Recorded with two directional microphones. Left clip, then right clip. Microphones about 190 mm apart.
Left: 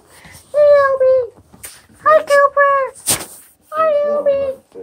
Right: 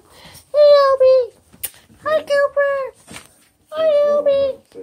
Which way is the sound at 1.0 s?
30° right (ahead or behind).